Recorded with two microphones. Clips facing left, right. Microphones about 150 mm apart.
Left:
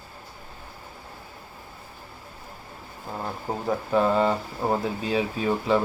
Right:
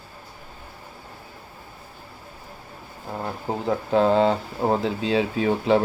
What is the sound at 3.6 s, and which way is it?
Speech, 70° right (ahead or behind).